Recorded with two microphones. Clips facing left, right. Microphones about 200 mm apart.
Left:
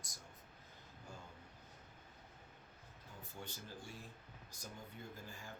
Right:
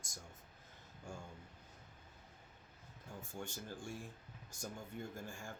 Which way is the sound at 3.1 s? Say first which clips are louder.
Right 5 dB; 50° right (ahead or behind).